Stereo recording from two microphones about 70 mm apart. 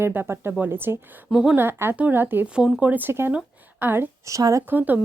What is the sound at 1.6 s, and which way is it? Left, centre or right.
Speech, right.